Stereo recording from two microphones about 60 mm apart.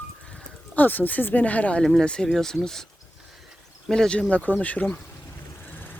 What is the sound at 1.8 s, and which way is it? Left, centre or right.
Speech, centre.